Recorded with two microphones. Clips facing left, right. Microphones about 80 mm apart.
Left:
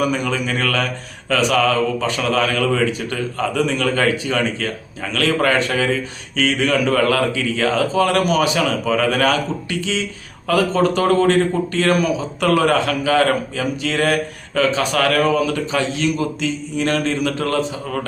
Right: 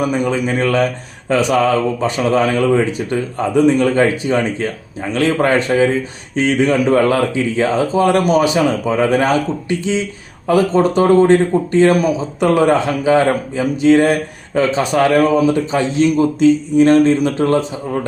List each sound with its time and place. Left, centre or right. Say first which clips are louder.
0.0 s speech: right 3 dB; right